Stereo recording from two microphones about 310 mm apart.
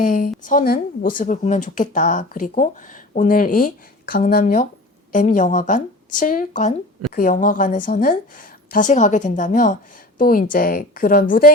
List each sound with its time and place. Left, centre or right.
0.0 s a woman's voice: left